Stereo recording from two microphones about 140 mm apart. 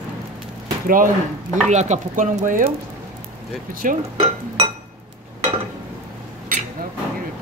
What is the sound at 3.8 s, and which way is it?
Speech, 65° right (ahead or behind).